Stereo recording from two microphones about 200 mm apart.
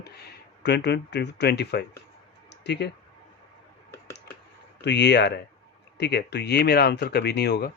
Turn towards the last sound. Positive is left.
turn(degrees=55)  # may be behind; listen again after turning